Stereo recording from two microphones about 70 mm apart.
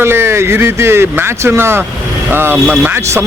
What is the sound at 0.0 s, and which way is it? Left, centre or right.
Speech, right.